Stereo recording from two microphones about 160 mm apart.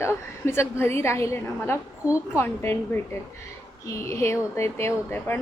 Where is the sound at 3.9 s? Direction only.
15° left (ahead or behind).